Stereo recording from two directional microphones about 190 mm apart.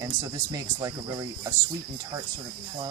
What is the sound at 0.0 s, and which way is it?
Cricket, 20° right (ahead or behind).